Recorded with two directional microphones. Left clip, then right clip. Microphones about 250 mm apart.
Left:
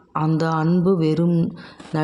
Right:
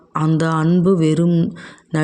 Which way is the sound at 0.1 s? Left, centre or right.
Right.